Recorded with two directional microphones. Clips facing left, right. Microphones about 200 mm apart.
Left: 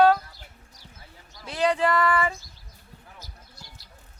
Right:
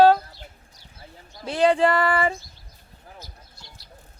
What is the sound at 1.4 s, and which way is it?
Speech, 30° right (ahead or behind).